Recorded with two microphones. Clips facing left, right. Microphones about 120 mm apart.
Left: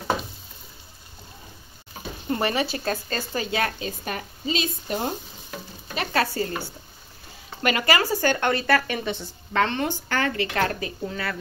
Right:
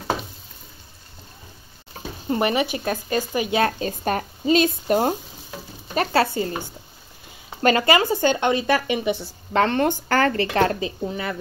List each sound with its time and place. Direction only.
2.2 s speech: 20° right (ahead or behind)
3.8 s speech: 45° right (ahead or behind)
6.1 s speech: 25° right (ahead or behind)
9.5 s a woman's voice: 30° right (ahead or behind)
9.8 s speech: 45° right (ahead or behind)
10.5 s speech: 30° right (ahead or behind)
11.0 s speech: 20° right (ahead or behind)